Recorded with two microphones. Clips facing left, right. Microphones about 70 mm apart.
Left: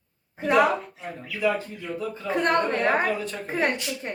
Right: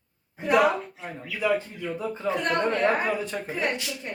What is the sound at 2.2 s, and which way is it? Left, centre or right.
A woman's voice, left.